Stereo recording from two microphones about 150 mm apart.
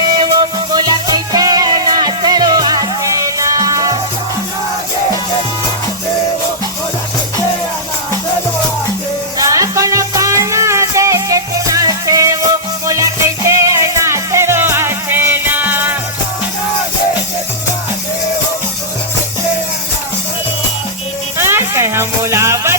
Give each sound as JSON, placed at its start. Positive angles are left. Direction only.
{"t": 0.0, "sound": "music", "side_deg": -30}
{"t": 9.5, "sound": "music", "side_deg": -20}
{"t": 21.3, "sound": "music", "side_deg": -15}